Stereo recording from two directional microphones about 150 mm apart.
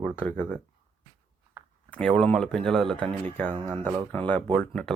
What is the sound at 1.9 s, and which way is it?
Speech, 5° left (ahead or behind).